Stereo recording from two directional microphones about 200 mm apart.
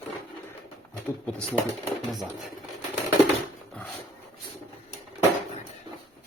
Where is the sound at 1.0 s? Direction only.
5° left (ahead or behind).